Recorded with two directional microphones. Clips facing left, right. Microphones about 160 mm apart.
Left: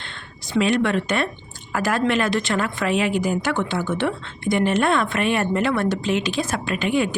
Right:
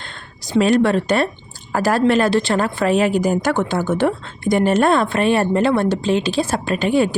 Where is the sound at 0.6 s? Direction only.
35° right (ahead or behind).